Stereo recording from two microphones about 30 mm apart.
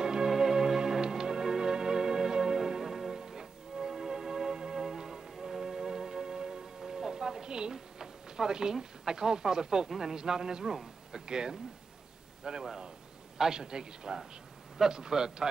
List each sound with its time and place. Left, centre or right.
0.0 s music: right
7.7 s a man's voice: right